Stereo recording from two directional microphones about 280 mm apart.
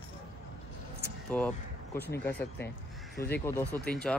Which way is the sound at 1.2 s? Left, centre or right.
Centre.